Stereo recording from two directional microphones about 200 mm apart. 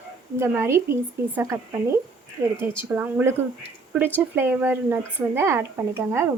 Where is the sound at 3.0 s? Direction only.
10° right (ahead or behind).